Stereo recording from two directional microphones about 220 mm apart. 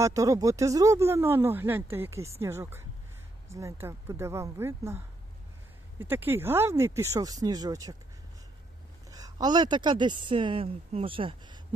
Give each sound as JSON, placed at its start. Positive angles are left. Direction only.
{"t": 0.0, "sound": "speech", "side_deg": -15}
{"t": 9.0, "sound": "speech", "side_deg": -15}